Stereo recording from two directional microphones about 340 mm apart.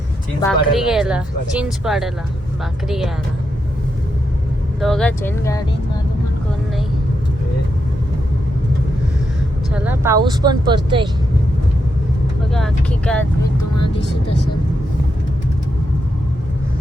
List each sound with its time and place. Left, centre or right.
0.4 s speech: centre
4.8 s speech: centre
9.7 s speech: centre
12.5 s speech: centre
13.7 s speech: left